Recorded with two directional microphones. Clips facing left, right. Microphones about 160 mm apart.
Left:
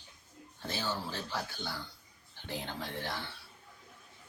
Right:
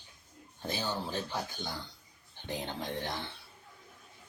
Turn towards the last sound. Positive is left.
turn(degrees=-20)  # may be behind; listen again after turning